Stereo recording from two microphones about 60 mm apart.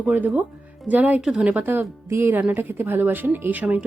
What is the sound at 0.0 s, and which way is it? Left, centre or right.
Speech, right.